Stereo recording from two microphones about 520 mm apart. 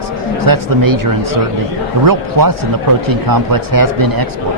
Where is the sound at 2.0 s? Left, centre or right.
Right.